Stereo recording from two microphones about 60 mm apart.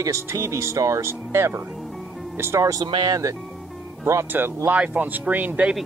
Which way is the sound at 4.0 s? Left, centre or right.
Right.